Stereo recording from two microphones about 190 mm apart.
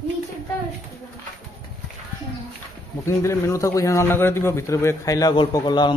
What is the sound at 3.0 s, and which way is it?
A man's voice, 15° left (ahead or behind).